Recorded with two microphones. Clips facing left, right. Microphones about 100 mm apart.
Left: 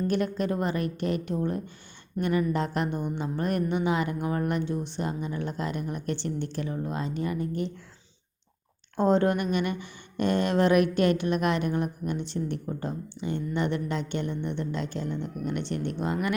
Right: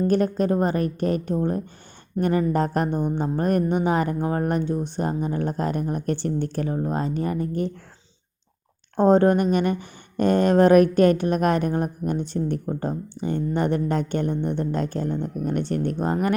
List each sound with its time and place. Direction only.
0.1 s speech: 40° right (ahead or behind)
9.0 s speech: 40° right (ahead or behind)